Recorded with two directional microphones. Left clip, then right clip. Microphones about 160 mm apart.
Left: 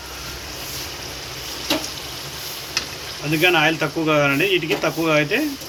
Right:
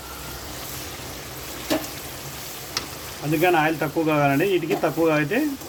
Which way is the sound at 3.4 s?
50° right (ahead or behind).